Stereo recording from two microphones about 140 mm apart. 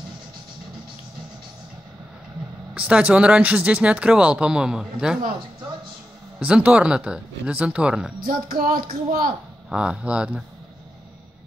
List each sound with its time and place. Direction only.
2.7 s speech: 10° right (ahead or behind)
6.4 s speech: 10° right (ahead or behind)
8.2 s speech: 90° right
9.7 s speech: 5° right (ahead or behind)